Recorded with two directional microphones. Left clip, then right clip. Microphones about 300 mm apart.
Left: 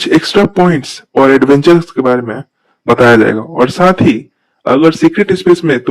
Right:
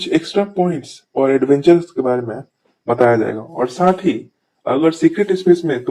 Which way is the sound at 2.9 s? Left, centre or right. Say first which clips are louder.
Left 7 dB; left.